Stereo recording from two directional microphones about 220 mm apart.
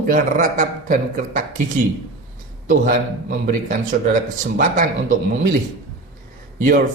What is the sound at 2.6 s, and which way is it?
A man's voice, 40° right (ahead or behind).